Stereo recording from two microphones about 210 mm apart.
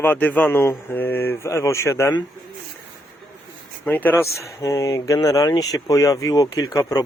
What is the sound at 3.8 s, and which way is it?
Speech, 10° left (ahead or behind).